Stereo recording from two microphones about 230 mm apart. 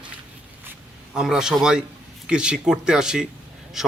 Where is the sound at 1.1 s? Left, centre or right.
Centre.